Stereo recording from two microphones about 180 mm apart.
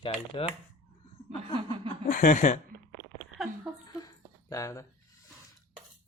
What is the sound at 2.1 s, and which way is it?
Speech, 45° left (ahead or behind).